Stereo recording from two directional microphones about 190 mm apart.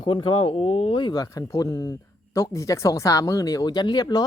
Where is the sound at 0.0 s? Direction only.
25° left (ahead or behind).